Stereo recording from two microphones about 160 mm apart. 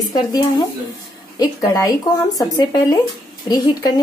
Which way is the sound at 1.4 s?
20° left (ahead or behind).